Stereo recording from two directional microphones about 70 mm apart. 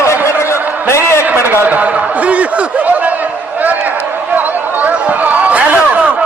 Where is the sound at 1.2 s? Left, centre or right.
Right.